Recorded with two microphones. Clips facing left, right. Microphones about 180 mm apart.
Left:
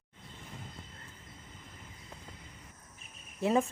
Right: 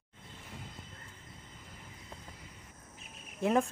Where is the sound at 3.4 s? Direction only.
Centre (ahead or behind).